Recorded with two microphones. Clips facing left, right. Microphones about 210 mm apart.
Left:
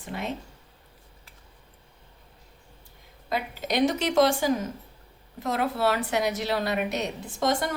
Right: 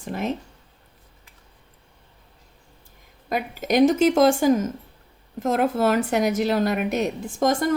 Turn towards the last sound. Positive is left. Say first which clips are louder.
# right 4 dB
turn(degrees=-45)  # may be behind; listen again after turning